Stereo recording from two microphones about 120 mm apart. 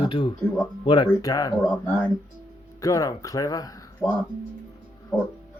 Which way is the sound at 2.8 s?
30° left (ahead or behind).